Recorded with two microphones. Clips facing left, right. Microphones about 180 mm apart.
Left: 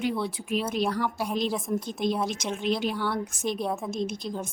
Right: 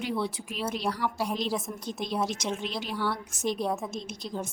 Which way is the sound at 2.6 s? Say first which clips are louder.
Left 4 dB; 55° left (ahead or behind).